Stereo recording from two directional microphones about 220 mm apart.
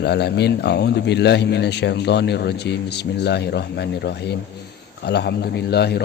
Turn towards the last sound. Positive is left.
turn(degrees=50)  # may be behind; listen again after turning